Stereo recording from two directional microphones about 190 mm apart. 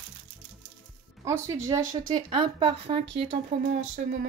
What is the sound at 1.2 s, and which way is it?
Speech, 15° right (ahead or behind).